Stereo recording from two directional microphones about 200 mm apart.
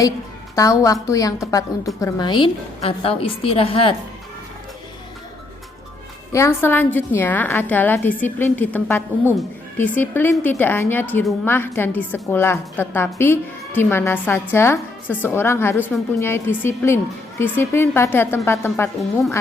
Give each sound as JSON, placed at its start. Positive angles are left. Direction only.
{"t": 0.5, "sound": "a woman's voice", "side_deg": 15}
{"t": 6.3, "sound": "a woman's voice", "side_deg": 15}